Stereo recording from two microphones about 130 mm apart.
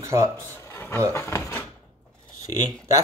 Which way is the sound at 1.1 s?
20° left (ahead or behind).